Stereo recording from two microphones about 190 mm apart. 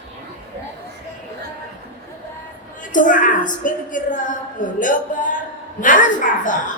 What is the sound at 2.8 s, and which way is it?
A woman's voice, 45° left (ahead or behind).